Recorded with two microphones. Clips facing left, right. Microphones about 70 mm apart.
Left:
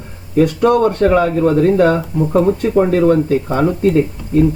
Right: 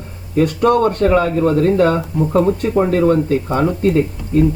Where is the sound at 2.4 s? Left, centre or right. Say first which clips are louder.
Left 2 dB; centre.